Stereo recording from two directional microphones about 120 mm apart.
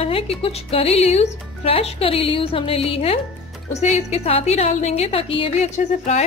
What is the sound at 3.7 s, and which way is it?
A woman's voice, 65° left (ahead or behind).